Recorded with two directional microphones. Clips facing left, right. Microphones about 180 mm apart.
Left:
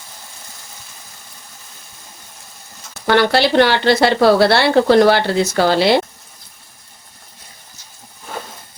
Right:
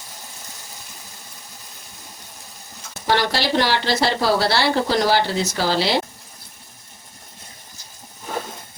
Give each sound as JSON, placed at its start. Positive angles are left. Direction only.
{"t": 3.1, "sound": "a woman's voice", "side_deg": 60}